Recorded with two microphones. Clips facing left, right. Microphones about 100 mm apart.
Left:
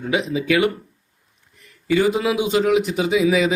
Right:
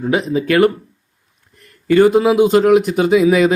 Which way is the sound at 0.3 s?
45° right (ahead or behind).